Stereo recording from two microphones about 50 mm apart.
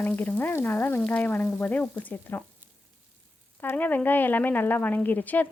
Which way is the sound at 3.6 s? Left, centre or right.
Left.